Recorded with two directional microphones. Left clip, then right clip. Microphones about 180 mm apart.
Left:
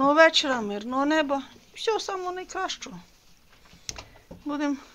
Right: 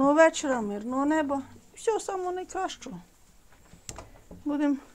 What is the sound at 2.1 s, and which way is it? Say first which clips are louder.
Speech: even; 25° right (ahead or behind).